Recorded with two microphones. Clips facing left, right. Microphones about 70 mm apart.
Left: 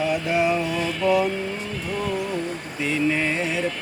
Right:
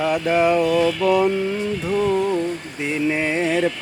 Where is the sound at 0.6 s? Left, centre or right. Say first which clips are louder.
Right 7 dB; right.